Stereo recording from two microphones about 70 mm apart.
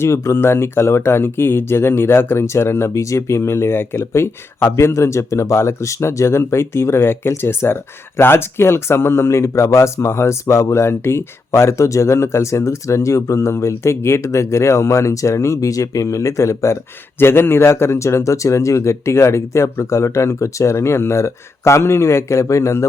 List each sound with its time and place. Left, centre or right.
0.0 s speech: left
17.2 s speech: left